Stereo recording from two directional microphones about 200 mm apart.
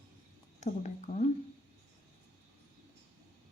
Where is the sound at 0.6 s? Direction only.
35° left (ahead or behind).